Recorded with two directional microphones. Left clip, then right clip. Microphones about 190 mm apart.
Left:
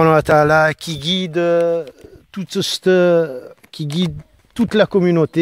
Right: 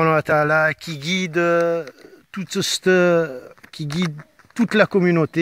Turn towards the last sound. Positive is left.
turn(degrees=35)  # may be behind; listen again after turning